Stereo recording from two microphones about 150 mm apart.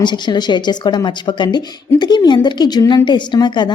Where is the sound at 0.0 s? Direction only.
30° left (ahead or behind).